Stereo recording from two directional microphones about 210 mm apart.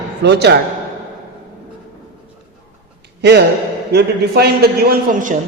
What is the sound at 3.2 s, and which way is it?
A man's voice, 50° right (ahead or behind).